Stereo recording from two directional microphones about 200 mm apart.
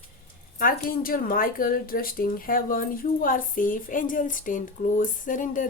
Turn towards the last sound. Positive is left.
turn(degrees=40)  # may be behind; listen again after turning